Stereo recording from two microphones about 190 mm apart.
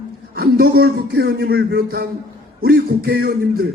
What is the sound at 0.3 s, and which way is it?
A man's voice, 50° right (ahead or behind).